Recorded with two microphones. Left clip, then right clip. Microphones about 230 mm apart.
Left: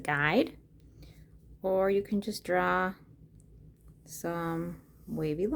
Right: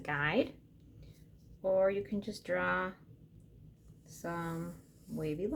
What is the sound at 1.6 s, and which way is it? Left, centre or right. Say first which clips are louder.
A woman's voice: left 2 dB; left.